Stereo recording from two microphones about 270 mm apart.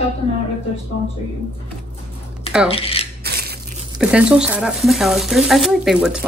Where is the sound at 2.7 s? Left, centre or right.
Left.